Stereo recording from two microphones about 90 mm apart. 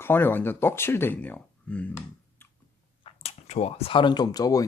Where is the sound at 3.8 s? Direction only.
70° left (ahead or behind); by 4.6 s 45° left (ahead or behind).